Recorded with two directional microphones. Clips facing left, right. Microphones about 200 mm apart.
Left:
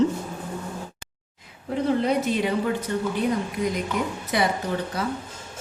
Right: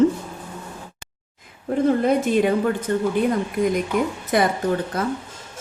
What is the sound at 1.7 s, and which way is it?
A woman's voice, 50° right (ahead or behind).